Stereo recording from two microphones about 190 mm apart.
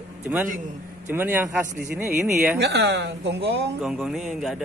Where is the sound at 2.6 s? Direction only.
65° right (ahead or behind).